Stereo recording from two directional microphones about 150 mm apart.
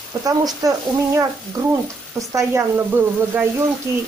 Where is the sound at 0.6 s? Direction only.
25° right (ahead or behind).